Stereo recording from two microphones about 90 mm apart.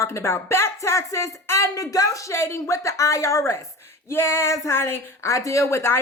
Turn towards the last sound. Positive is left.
turn(degrees=30)  # may be behind; listen again after turning